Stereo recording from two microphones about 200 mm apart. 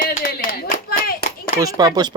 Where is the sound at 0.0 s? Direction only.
45° left (ahead or behind).